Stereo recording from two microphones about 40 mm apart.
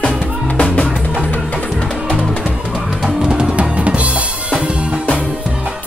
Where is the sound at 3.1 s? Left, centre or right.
Right.